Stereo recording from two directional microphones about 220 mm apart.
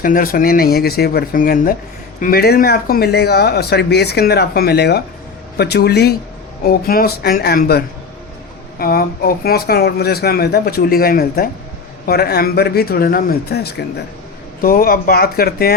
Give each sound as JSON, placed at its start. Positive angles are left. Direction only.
{"t": 0.0, "sound": "speech", "side_deg": 40}